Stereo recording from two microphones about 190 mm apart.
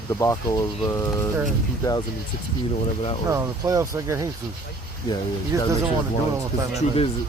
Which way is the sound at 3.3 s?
15° right (ahead or behind).